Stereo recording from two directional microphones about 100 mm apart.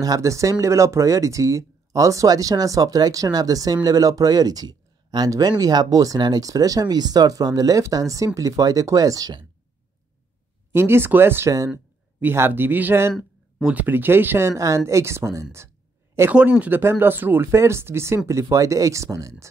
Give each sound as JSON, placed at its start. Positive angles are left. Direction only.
{"t": 0.0, "sound": "speech", "side_deg": -35}
{"t": 10.7, "sound": "speech", "side_deg": -25}
{"t": 12.2, "sound": "speech", "side_deg": -20}
{"t": 13.1, "sound": "a sound", "side_deg": -5}
{"t": 13.7, "sound": "speech", "side_deg": -20}
{"t": 16.3, "sound": "speech", "side_deg": -15}